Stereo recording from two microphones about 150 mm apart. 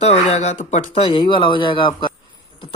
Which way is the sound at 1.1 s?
35° left (ahead or behind).